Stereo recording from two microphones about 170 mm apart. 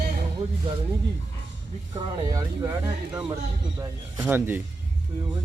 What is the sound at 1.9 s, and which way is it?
Speech, 25° right (ahead or behind).